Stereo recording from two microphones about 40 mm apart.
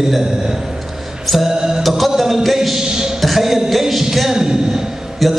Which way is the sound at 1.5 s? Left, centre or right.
Centre.